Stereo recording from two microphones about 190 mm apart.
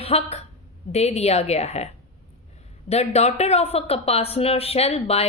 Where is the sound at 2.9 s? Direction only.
35° left (ahead or behind).